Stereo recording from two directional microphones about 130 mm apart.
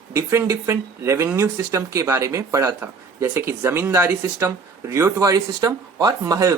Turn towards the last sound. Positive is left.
turn(degrees=-25)  # may be behind; listen again after turning